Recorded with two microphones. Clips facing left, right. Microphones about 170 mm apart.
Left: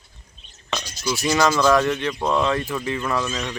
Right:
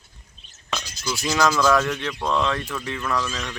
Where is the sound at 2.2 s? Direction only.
15° left (ahead or behind).